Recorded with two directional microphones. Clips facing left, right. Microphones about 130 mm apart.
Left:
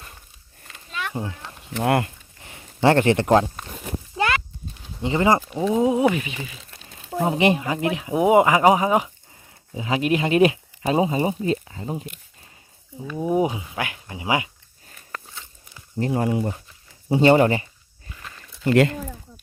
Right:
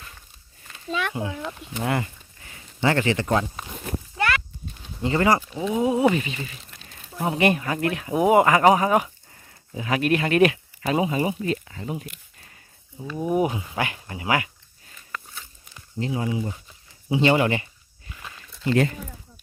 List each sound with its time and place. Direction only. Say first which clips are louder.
1.2 s speech: even; 35° left (ahead or behind)
1.8 s speech: left 5 dB; 60° left (ahead or behind)
4.1 s horse: left 2 dB; 20° left (ahead or behind)
5.0 s speech: left 1 dB; 20° left (ahead or behind)
7.2 s speech: left 2 dB; 20° left (ahead or behind)
13.2 s speech: left 1 dB; 20° left (ahead or behind)
13.7 s speech: right 1 dB; centre (ahead or behind)
14.2 s speech: left 1 dB; 20° left (ahead or behind)
16.0 s speech: left 4 dB; 50° left (ahead or behind)
17.1 s speech: left 4 dB; 40° left (ahead or behind)
18.2 s a sound: right 1 dB; 5° right (ahead or behind)
18.7 s speech: left 4 dB; 75° left (ahead or behind)